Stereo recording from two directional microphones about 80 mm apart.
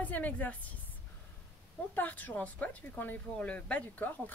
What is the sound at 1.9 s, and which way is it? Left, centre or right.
A woman's voice, left.